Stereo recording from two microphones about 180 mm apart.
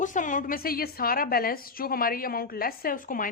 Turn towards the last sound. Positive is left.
turn(degrees=50)  # may be behind; listen again after turning